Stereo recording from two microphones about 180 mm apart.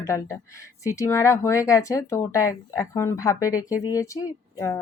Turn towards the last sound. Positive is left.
turn(degrees=15)  # may be behind; listen again after turning